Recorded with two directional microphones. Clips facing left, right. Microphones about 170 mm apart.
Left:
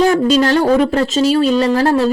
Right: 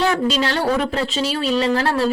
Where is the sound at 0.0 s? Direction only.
45° left (ahead or behind).